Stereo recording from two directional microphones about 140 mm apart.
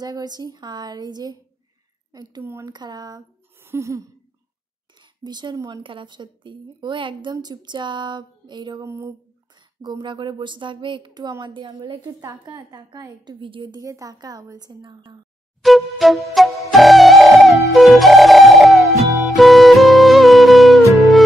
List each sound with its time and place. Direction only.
0.0 s a woman's voice: 30° right (ahead or behind)
2.4 s a woman's voice: 20° right (ahead or behind)
2.7 s speech: 30° right (ahead or behind)
3.6 s a sound: 20° right (ahead or behind)
5.2 s speech: 30° right (ahead or behind)
8.8 s a woman's voice: 20° right (ahead or behind)
9.8 s a woman's voice: 35° right (ahead or behind)
15.6 s music: centre (ahead or behind)